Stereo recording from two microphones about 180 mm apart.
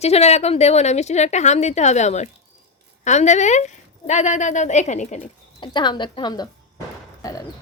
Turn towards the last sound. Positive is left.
turn(degrees=20)  # may be behind; listen again after turning